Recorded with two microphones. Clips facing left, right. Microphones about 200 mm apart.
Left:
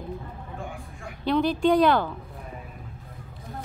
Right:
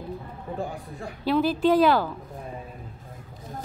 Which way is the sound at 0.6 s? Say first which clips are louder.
Right 6 dB; 35° right (ahead or behind).